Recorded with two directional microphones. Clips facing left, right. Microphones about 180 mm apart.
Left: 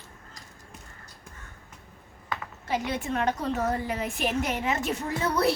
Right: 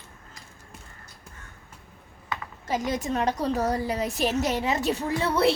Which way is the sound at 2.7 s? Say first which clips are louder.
Right 2 dB; 40° right (ahead or behind).